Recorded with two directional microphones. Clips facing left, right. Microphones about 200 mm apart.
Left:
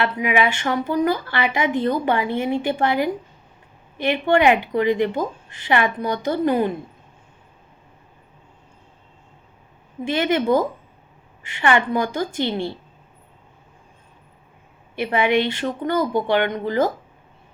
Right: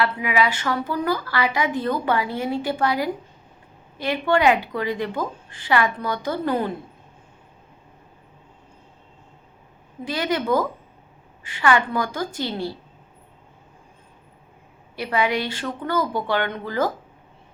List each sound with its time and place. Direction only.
0.0 s a woman's voice: 20° left (ahead or behind)
10.0 s a woman's voice: 25° left (ahead or behind)
14.9 s a woman's voice: 20° left (ahead or behind)